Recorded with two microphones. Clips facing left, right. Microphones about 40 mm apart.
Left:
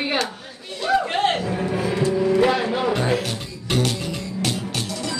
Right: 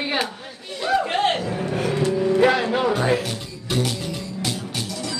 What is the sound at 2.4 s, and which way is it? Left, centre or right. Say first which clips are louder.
Speech: right 3 dB; centre.